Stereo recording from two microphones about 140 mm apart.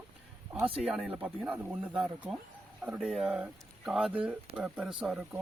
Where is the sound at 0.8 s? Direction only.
Centre (ahead or behind).